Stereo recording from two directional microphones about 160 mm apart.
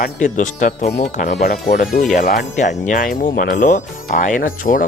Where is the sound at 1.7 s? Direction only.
65° left (ahead or behind).